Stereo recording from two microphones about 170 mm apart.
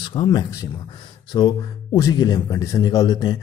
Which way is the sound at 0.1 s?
25° left (ahead or behind).